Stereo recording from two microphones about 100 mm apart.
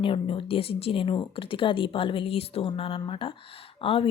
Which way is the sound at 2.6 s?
55° left (ahead or behind).